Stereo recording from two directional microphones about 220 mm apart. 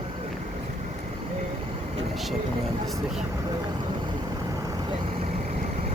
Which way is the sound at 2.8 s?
Centre (ahead or behind).